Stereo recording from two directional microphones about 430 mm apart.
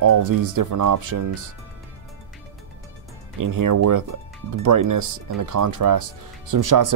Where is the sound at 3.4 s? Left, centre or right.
Right.